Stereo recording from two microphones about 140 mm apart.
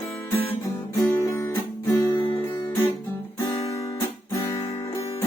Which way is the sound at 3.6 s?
25° left (ahead or behind).